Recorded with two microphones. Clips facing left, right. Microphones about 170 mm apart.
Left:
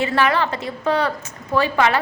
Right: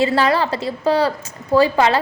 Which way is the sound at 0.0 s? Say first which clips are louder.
Right 3 dB; 35° right (ahead or behind).